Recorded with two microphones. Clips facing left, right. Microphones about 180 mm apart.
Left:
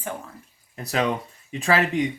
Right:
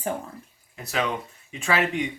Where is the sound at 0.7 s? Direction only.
35° left (ahead or behind).